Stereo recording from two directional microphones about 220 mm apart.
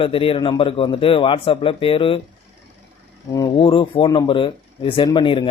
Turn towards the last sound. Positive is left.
turn(degrees=20)  # may be behind; listen again after turning